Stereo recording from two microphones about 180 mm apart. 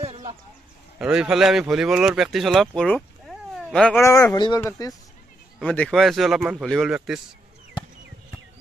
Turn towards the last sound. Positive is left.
turn(degrees=0)  # may be behind; listen again after turning